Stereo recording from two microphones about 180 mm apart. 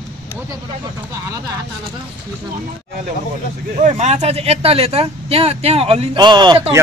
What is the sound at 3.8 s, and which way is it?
Speech, 40° right (ahead or behind).